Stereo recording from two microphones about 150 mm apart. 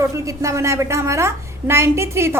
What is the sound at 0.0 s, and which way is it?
A woman's voice, 20° right (ahead or behind).